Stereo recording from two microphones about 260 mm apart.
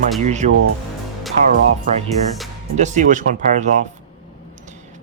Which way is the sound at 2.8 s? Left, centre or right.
Right.